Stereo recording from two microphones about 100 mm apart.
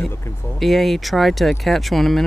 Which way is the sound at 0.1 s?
25° left (ahead or behind).